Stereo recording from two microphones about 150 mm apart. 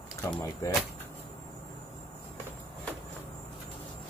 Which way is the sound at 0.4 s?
20° left (ahead or behind).